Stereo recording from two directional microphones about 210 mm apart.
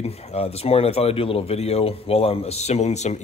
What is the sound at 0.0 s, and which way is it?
Speech, 30° left (ahead or behind).